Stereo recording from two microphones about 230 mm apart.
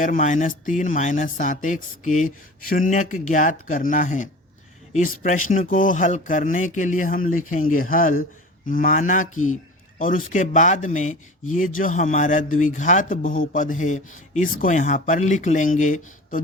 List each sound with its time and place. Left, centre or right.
0.0 s speech: left